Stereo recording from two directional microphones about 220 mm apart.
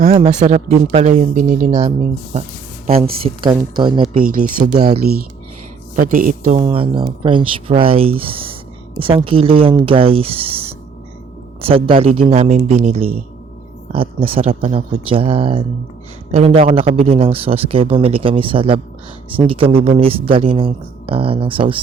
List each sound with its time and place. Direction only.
0.1 s speech: 30° right (ahead or behind)
4.1 s speech: 40° right (ahead or behind)
6.5 s speech: 25° right (ahead or behind)